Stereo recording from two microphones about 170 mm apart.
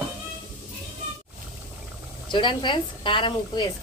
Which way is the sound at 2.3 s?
30° left (ahead or behind).